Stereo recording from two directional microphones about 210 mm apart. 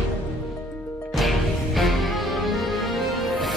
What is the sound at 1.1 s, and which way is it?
Music, centre (ahead or behind).